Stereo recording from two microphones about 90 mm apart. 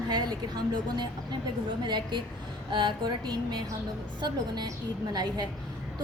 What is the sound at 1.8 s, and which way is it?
A woman's voice, 55° right (ahead or behind).